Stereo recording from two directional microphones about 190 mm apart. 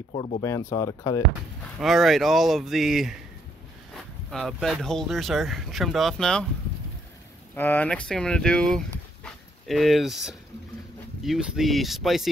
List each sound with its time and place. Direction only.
0.1 s speech: 30° left (ahead or behind)
0.4 s speech: 15° left (ahead or behind)
1.8 s speech: centre (ahead or behind)
7.5 s speech: 10° left (ahead or behind)